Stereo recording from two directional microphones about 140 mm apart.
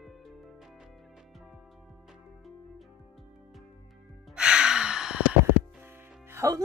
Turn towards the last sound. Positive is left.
turn(degrees=-25)  # may be behind; listen again after turning